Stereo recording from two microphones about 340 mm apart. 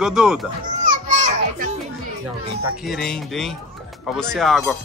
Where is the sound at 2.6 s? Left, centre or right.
Centre.